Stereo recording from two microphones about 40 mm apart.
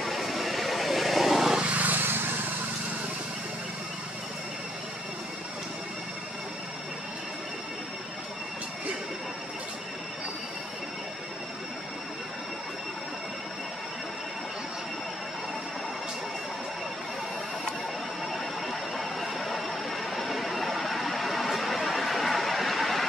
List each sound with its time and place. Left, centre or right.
0.0 s vehicle: centre
1.6 s vehicle: right
18.3 s a sound: centre